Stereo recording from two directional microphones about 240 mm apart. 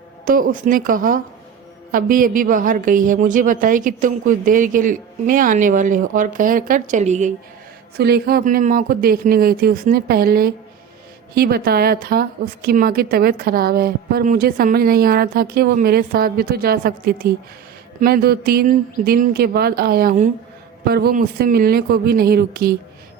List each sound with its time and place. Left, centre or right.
0.3 s a woman's voice: right
7.9 s a woman's voice: right